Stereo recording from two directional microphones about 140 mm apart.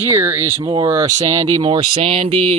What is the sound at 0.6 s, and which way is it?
Speech, 35° right (ahead or behind).